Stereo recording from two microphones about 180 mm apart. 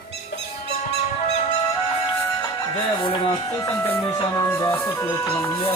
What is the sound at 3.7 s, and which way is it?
Music, 10° left (ahead or behind).